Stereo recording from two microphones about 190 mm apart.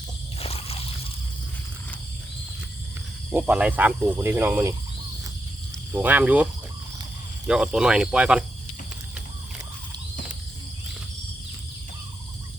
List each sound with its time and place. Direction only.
0.3 s squish: 30° left (ahead or behind)
3.2 s speech: 5° right (ahead or behind)
5.9 s speech: 10° right (ahead or behind)